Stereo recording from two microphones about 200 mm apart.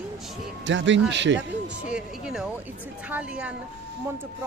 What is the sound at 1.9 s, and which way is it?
Speech, 5° right (ahead or behind).